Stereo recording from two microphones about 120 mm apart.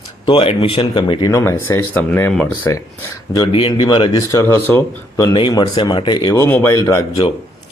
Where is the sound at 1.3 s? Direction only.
25° left (ahead or behind).